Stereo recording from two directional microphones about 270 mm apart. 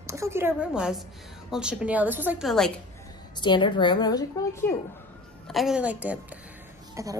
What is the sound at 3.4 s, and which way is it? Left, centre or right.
A woman's voice, centre.